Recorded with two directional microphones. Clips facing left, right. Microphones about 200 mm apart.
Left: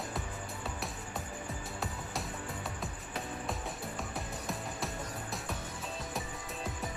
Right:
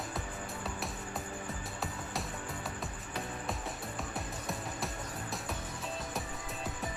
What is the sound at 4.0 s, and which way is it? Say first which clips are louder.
Music: even; centre (ahead or behind).